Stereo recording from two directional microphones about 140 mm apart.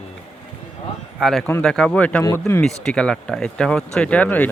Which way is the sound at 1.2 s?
Centre (ahead or behind).